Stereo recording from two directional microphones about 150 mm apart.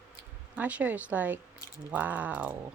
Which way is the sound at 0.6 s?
10° right (ahead or behind).